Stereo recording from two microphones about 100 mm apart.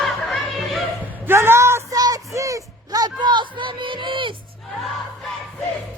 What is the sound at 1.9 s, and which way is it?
Music, 40° right (ahead or behind).